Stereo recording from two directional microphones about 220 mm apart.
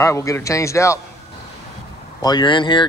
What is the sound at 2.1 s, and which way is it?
Speech, 20° left (ahead or behind).